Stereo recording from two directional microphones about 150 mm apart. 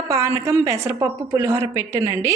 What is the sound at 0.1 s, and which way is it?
A woman's voice, 20° right (ahead or behind).